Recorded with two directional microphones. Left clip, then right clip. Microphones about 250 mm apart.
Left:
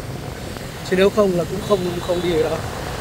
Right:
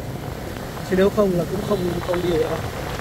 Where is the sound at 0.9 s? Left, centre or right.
Centre.